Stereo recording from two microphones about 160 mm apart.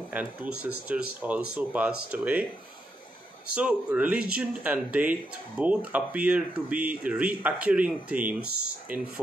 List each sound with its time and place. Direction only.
0.1 s speech: 10° right (ahead or behind)
3.5 s speech: 10° right (ahead or behind)